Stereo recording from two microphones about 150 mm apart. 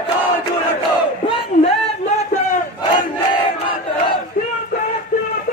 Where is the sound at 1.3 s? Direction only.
40° left (ahead or behind).